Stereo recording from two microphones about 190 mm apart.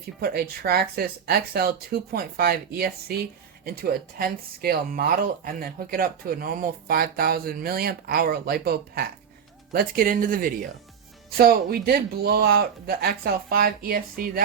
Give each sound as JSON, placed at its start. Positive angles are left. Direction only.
{"t": 0.2, "sound": "speech", "side_deg": -55}